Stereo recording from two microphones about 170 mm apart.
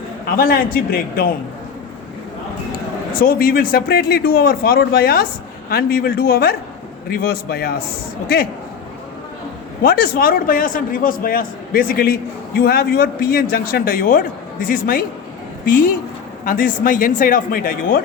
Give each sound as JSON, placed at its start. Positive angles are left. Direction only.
{"t": 0.3, "sound": "a man's voice", "side_deg": 60}
{"t": 3.2, "sound": "a man's voice", "side_deg": 60}
{"t": 9.8, "sound": "a man's voice", "side_deg": 60}